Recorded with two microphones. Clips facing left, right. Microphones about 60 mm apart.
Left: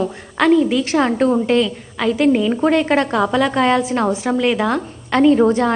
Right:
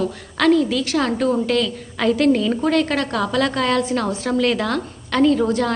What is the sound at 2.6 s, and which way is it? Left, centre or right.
A woman's voice, left.